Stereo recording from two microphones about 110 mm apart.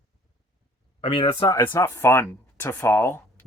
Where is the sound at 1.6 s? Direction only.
25° left (ahead or behind).